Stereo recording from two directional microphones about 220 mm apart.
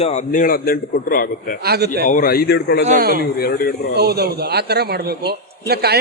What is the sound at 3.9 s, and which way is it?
A man's voice, 45° right (ahead or behind).